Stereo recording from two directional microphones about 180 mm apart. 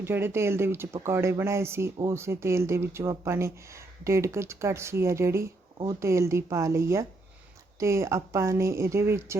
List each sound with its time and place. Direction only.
0.0 s speech: 10° right (ahead or behind)